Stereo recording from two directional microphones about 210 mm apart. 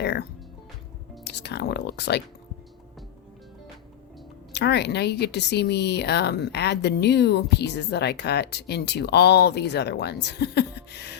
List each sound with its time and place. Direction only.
0.0 s music: 55° left (ahead or behind)
4.5 s speech: 55° left (ahead or behind)